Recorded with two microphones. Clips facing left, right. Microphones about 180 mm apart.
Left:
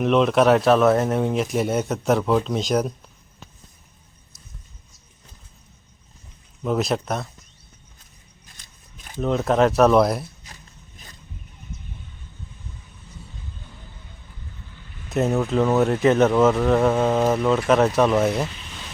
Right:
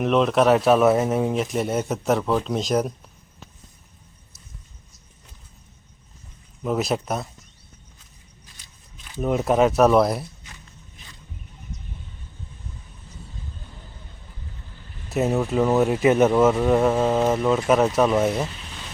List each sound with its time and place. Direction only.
0.0 s speech: centre (ahead or behind)
6.6 s speech: 5° right (ahead or behind)
9.1 s speech: 10° right (ahead or behind)
10.4 s a sound: 40° left (ahead or behind)
15.1 s speech: 5° right (ahead or behind)